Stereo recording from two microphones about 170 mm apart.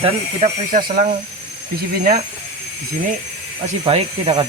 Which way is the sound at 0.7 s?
60° right (ahead or behind).